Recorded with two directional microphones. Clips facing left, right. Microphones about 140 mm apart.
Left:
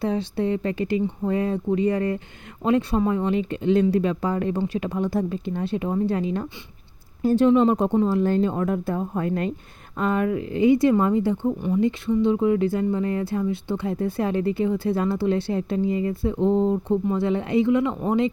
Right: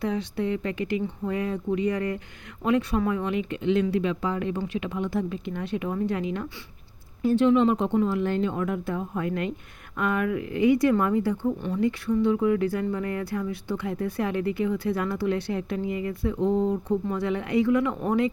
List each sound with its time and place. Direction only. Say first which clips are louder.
0.0 s speech: left 3 dB; 30° left (ahead or behind)